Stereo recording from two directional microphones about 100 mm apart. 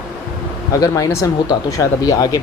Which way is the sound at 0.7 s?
35° left (ahead or behind).